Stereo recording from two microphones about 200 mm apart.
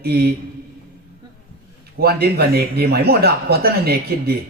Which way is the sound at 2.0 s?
50° right (ahead or behind).